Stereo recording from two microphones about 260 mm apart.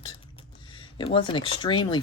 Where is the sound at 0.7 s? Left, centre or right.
Centre.